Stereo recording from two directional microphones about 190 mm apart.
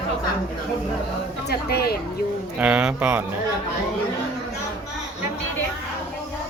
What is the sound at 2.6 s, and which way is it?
Speech, 5° right (ahead or behind).